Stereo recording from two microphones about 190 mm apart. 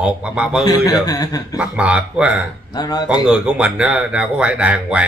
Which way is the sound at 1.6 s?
5° right (ahead or behind).